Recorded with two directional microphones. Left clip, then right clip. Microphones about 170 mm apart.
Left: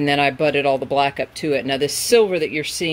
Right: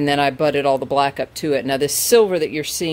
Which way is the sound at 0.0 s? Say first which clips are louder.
Even; 10° right (ahead or behind).